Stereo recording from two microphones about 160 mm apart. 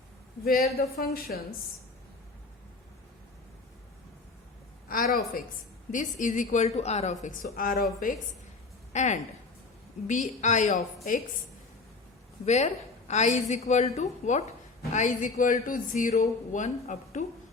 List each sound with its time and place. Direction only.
0.4 s speech: 65° left (ahead or behind)
4.9 s a woman's voice: 60° left (ahead or behind)
7.5 s a woman's voice: 60° left (ahead or behind)
12.5 s a woman's voice: 45° left (ahead or behind)